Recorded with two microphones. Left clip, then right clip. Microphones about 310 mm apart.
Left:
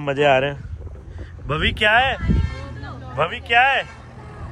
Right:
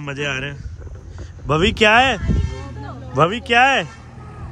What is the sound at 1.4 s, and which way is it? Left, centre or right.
Speech, centre.